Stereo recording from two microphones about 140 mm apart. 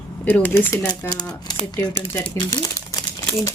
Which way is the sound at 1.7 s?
30° left (ahead or behind).